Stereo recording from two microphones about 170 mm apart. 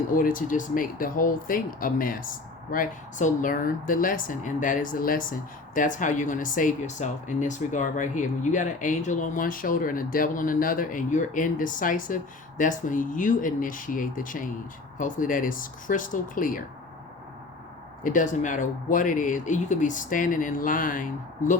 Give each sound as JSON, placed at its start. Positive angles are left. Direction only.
{"t": 0.1, "sound": "speech", "side_deg": 55}
{"t": 18.0, "sound": "speech", "side_deg": 50}